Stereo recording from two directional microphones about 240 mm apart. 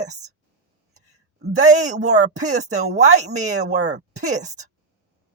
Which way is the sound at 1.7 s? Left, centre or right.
Right.